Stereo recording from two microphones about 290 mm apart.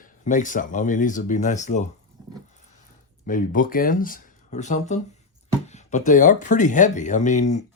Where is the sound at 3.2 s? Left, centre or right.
Left.